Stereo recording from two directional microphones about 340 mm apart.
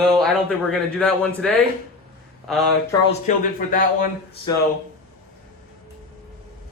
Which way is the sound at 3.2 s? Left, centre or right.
Left.